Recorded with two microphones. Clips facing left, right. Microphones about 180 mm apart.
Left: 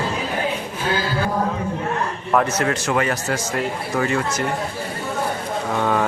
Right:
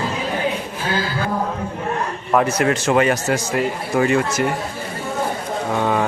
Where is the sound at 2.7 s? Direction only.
20° right (ahead or behind).